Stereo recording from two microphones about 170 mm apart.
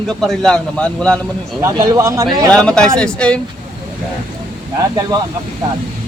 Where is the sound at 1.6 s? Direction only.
20° right (ahead or behind).